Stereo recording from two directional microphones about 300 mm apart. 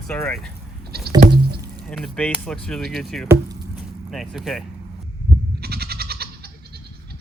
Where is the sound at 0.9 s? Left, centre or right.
Right.